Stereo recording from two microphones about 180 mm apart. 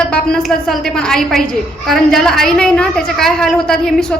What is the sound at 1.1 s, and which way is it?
A woman's voice, 5° left (ahead or behind).